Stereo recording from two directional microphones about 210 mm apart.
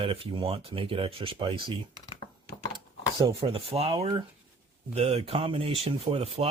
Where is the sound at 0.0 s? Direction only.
25° right (ahead or behind).